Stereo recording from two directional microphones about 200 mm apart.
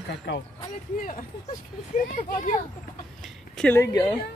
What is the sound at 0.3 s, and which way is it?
Speech, 60° left (ahead or behind).